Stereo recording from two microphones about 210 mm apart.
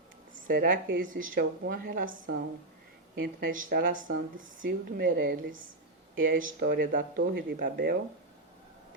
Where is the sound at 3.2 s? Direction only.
45° right (ahead or behind).